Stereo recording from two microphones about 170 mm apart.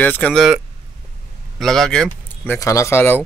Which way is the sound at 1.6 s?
5° left (ahead or behind).